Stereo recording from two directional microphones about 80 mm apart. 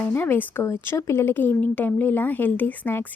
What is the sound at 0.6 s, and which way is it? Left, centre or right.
A woman's voice, left.